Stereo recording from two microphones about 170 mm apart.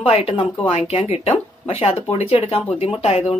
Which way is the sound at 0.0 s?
35° left (ahead or behind).